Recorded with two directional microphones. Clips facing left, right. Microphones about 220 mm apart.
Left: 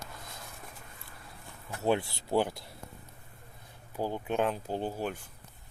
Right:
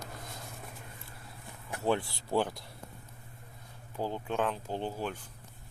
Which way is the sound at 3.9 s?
10° left (ahead or behind).